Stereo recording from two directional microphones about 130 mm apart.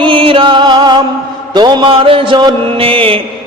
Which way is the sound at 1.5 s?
35° right (ahead or behind).